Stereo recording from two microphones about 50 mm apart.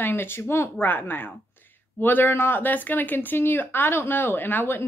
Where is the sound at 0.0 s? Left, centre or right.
Left.